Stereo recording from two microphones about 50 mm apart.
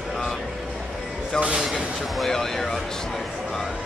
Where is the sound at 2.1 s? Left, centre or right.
Centre.